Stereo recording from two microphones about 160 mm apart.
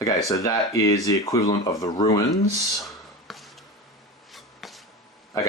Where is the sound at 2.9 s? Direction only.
Centre (ahead or behind).